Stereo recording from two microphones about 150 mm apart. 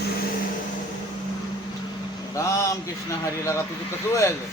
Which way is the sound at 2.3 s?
20° left (ahead or behind).